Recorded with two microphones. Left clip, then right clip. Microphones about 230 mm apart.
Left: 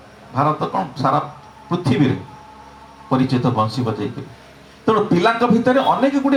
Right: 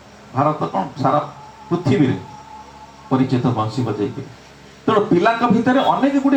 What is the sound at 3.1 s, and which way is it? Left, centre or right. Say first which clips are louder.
Speech: even; left.